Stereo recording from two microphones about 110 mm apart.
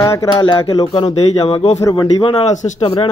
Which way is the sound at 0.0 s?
30° left (ahead or behind).